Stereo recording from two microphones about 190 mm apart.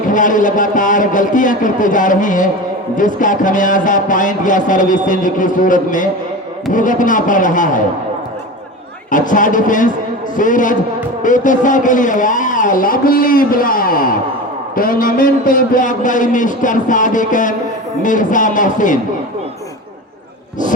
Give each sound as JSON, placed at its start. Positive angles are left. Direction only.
{"t": 0.1, "sound": "a man's voice", "side_deg": 45}
{"t": 9.0, "sound": "a man's voice", "side_deg": 45}